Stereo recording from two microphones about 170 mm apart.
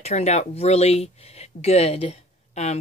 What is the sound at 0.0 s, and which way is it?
Speech, 40° left (ahead or behind).